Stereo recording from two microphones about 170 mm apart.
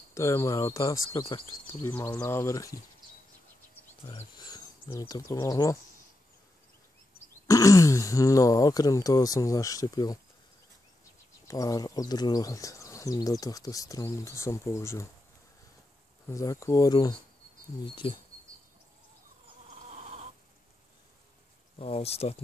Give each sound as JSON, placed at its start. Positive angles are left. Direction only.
{"t": 0.1, "sound": "speech", "side_deg": 15}
{"t": 4.1, "sound": "speech", "side_deg": 25}
{"t": 7.4, "sound": "speech", "side_deg": 20}
{"t": 11.4, "sound": "speech", "side_deg": 20}
{"t": 16.3, "sound": "speech", "side_deg": 20}
{"t": 18.0, "sound": "speech", "side_deg": 35}
{"t": 19.9, "sound": "a sound", "side_deg": -35}
{"t": 21.7, "sound": "speech", "side_deg": 35}